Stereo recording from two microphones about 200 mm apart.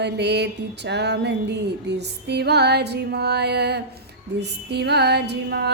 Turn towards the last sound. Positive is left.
turn(degrees=-55)  # may be behind; listen again after turning